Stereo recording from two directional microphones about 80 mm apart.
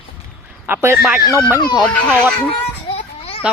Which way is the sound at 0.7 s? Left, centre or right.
Right.